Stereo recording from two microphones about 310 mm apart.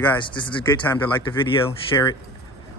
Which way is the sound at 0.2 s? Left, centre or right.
Centre.